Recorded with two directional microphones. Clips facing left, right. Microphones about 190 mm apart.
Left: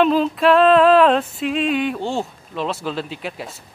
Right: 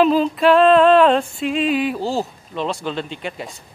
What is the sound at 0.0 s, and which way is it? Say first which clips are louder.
Female singing: right 1 dB; centre (ahead or behind).